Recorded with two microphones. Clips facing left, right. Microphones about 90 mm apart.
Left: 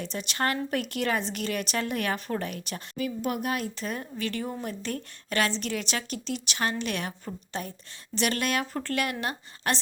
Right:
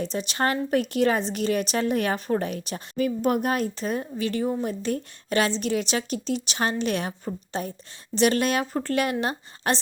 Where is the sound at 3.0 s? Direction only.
45° right (ahead or behind).